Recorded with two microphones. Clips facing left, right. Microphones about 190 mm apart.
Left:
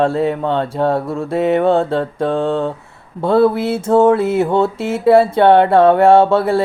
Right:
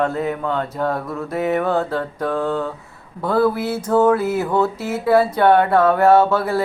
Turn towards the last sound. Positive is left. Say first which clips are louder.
# left 4 dB
turn(degrees=25)  # may be behind; listen again after turning